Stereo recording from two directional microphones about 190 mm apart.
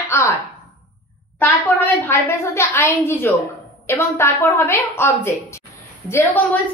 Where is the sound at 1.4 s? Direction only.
10° left (ahead or behind).